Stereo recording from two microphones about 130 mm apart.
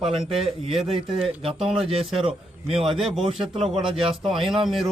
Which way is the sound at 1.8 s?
50° right (ahead or behind).